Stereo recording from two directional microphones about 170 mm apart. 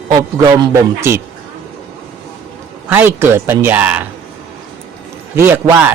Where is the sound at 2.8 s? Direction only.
10° right (ahead or behind).